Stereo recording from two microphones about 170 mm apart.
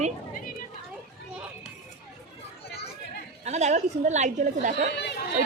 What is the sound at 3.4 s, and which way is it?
A woman's voice, 40° right (ahead or behind).